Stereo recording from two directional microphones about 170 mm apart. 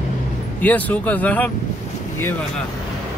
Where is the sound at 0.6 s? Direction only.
10° left (ahead or behind).